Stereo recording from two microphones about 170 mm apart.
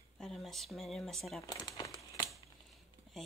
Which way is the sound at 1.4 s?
25° left (ahead or behind).